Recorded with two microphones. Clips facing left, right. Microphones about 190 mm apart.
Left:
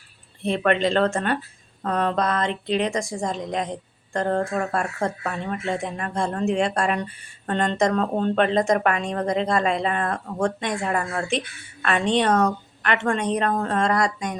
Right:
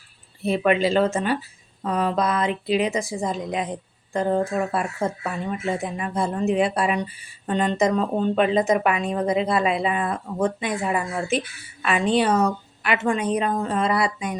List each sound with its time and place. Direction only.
0.4 s speech: 5° right (ahead or behind)